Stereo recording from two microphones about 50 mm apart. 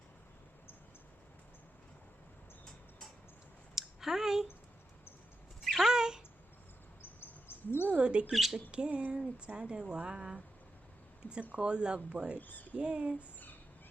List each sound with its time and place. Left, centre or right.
3.8 s a sound: centre
5.8 s a sound: centre
7.2 s a sound: left
7.9 s bird: right
8.3 s speech: centre
8.7 s speech: right
11.5 s speech: right
12.4 s speech: left
12.7 s speech: right